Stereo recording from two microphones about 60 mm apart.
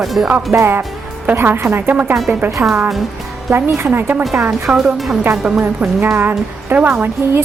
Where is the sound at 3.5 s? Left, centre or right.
Right.